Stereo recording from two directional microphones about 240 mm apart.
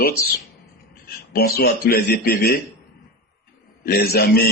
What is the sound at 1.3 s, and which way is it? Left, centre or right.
Speech, left.